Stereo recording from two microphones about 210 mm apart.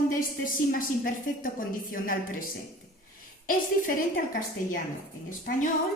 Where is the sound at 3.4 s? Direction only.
40° left (ahead or behind).